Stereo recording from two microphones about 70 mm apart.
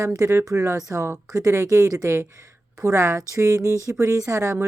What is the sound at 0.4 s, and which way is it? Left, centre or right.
Speech, right.